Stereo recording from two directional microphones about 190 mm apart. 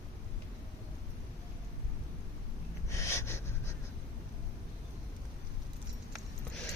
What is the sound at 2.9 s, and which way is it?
Snort, 15° left (ahead or behind).